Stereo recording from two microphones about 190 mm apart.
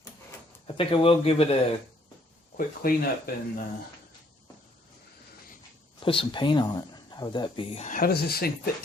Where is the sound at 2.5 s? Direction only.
50° left (ahead or behind).